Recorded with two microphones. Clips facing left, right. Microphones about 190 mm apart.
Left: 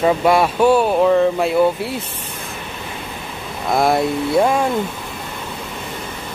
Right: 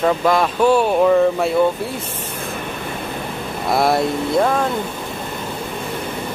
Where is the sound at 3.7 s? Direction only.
Centre (ahead or behind).